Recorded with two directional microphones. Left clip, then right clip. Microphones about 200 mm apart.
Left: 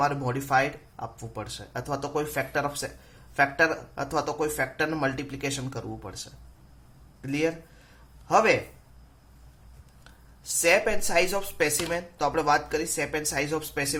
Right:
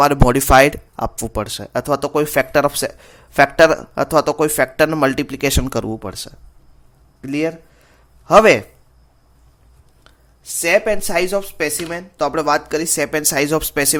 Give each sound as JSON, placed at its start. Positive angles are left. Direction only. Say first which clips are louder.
{"t": 0.0, "sound": "speech", "louder": "right 13 dB", "side_deg": -60}
{"t": 10.0, "sound": "speech", "louder": "right 4 dB", "side_deg": -40}